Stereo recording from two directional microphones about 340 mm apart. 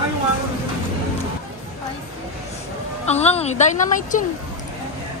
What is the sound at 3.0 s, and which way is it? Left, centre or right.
A woman's voice, centre.